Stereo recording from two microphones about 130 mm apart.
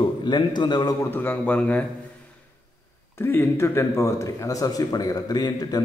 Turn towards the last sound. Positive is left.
turn(degrees=30)  # may be behind; listen again after turning